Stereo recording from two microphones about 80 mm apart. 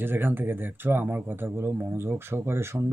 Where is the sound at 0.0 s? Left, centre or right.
Right.